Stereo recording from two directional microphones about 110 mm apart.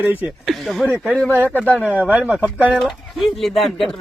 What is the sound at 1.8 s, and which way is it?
Speech, 10° right (ahead or behind).